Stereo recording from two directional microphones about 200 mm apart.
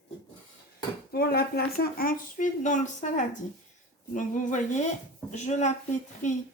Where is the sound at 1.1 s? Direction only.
50° left (ahead or behind).